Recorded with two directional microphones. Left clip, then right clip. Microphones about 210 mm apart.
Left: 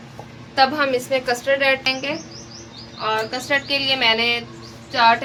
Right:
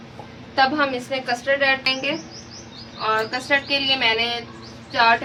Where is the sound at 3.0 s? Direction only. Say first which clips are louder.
Even; 30° left (ahead or behind).